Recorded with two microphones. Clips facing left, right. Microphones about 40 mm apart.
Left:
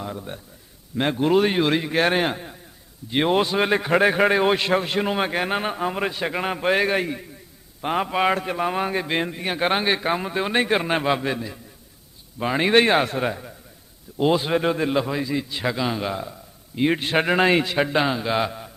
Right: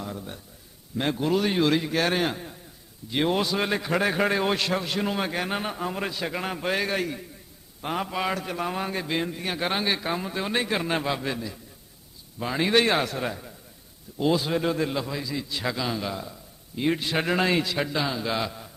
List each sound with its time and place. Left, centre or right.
0.0 s a man's voice: left
12.4 s a man's voice: left
17.0 s a man's voice: left
18.2 s a man's voice: left